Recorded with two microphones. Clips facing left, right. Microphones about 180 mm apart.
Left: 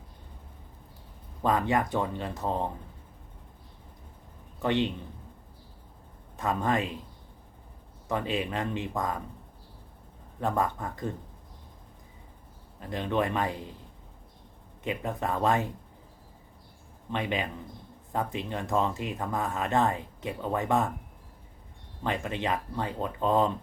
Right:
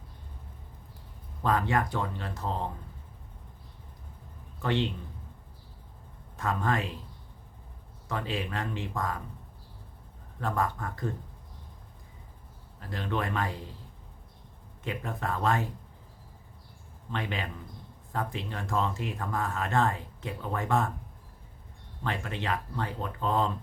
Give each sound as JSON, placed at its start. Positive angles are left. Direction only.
{"t": 1.5, "sound": "speech", "side_deg": 20}
{"t": 4.6, "sound": "a man's voice", "side_deg": 20}
{"t": 6.3, "sound": "speech", "side_deg": 20}
{"t": 8.0, "sound": "speech", "side_deg": 20}
{"t": 10.4, "sound": "speech", "side_deg": 20}
{"t": 12.8, "sound": "speech", "side_deg": 20}
{"t": 14.8, "sound": "speech", "side_deg": 20}
{"t": 17.1, "sound": "speech", "side_deg": 20}
{"t": 22.0, "sound": "speech", "side_deg": 20}